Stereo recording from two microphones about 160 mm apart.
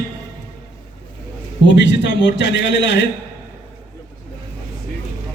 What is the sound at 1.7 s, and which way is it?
Speech, 90° left.